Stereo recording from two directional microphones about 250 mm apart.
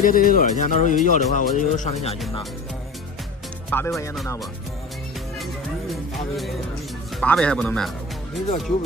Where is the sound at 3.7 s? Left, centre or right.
Centre.